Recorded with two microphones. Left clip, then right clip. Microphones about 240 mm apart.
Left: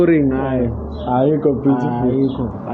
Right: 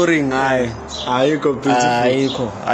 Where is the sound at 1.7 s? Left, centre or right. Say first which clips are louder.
Right 4 dB; right.